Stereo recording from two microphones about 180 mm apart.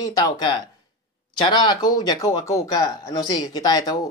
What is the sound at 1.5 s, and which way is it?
Speech, 25° left (ahead or behind).